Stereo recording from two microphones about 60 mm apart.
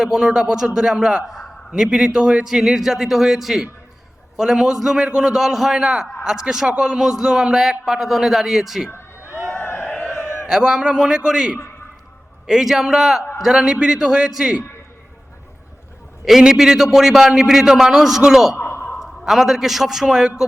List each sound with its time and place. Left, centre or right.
0.0 s a man's voice: centre
8.9 s a sound: left
10.4 s a man's voice: centre
16.2 s a man's voice: centre
18.5 s a sound: left
18.9 s a man's voice: centre